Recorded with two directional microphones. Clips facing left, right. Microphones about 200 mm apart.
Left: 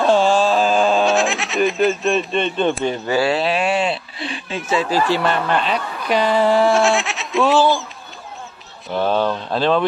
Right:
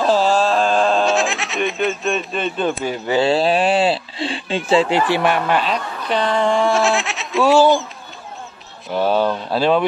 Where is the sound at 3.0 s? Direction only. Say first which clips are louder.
Right 4 dB; 20° right (ahead or behind); by 5.8 s 5° right (ahead or behind).